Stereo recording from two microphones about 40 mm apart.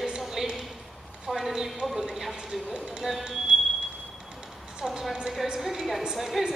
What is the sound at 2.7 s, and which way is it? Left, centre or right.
Music, centre.